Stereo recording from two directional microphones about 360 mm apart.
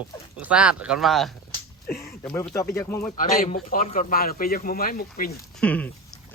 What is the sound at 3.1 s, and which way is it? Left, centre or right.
A man's voice, left.